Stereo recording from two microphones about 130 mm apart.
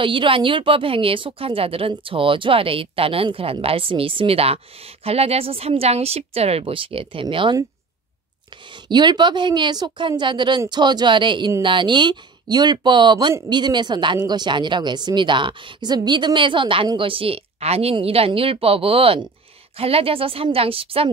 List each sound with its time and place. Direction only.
0.0 s a woman's voice: 40° right (ahead or behind)
8.8 s a woman's voice: 35° right (ahead or behind)